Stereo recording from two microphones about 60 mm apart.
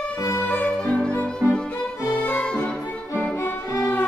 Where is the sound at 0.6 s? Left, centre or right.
Centre.